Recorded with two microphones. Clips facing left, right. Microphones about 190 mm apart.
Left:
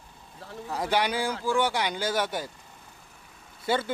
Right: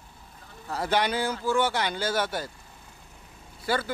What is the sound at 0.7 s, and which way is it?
Speech, 10° left (ahead or behind).